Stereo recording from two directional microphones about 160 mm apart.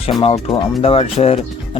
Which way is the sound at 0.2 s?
35° left (ahead or behind).